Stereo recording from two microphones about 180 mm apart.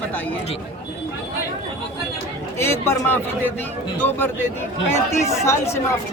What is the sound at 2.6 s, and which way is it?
Speech, 15° left (ahead or behind).